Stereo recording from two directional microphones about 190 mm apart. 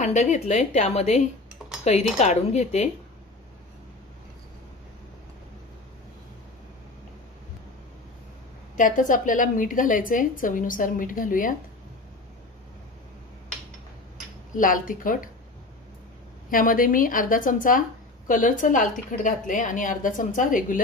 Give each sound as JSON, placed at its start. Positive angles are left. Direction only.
{"t": 0.0, "sound": "a woman's voice", "side_deg": 40}
{"t": 8.7, "sound": "speech", "side_deg": 45}
{"t": 14.5, "sound": "speech", "side_deg": 45}
{"t": 16.4, "sound": "speech", "side_deg": 45}